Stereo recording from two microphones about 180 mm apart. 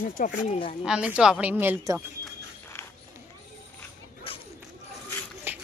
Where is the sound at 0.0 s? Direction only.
50° left (ahead or behind).